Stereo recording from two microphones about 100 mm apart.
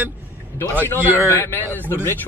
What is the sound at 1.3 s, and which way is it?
Speech, 25° left (ahead or behind).